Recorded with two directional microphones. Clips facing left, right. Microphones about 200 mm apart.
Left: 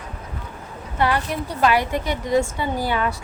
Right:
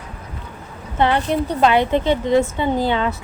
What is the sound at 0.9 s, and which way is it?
A woman's voice, 25° right (ahead or behind).